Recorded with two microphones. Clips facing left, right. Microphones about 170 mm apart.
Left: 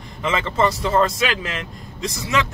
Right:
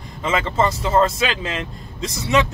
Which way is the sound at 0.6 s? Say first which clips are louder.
Even; 20° right (ahead or behind).